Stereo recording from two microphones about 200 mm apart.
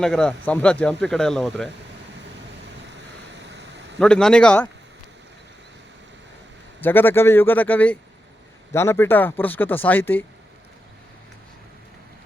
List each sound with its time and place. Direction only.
0.0 s speech: 5° left (ahead or behind)
2.8 s a sound: 60° right (ahead or behind)
4.0 s speech: 5° left (ahead or behind)
6.8 s speech: 10° left (ahead or behind)